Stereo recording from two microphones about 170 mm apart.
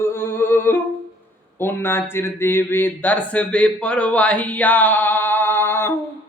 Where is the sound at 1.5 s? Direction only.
15° left (ahead or behind).